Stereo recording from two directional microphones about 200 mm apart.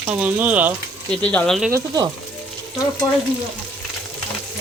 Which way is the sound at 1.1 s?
5° left (ahead or behind).